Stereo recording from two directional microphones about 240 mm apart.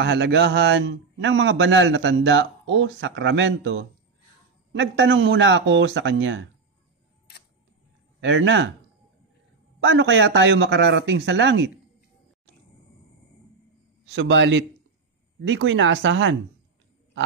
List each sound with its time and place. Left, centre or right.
0.0 s a man's voice: right
8.2 s a man's voice: right
9.8 s a man's voice: right
14.1 s a man's voice: right